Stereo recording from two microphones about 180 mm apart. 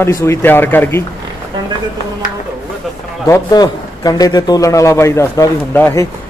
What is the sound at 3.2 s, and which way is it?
A man's voice, 20° left (ahead or behind).